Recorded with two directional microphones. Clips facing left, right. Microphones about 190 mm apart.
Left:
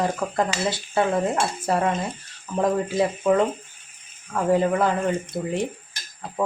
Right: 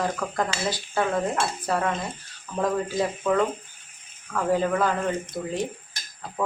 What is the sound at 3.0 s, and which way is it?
Speech, 25° left (ahead or behind).